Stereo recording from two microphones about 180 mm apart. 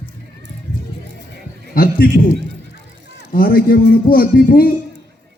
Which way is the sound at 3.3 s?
55° left (ahead or behind).